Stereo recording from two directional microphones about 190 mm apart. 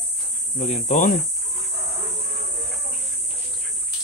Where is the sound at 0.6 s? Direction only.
40° left (ahead or behind).